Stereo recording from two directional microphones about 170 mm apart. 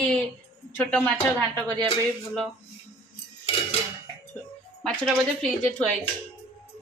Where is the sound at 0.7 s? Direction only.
10° left (ahead or behind).